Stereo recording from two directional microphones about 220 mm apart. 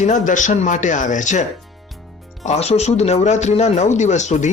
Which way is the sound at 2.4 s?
30° left (ahead or behind).